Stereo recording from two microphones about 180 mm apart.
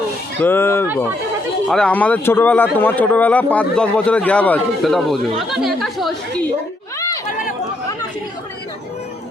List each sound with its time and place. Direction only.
0.3 s speech: 10° left (ahead or behind)